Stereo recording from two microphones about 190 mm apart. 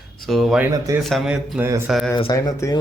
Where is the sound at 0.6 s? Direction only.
15° right (ahead or behind).